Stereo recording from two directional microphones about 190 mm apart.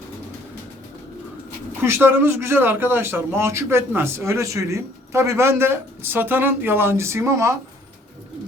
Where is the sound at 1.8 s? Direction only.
10° right (ahead or behind).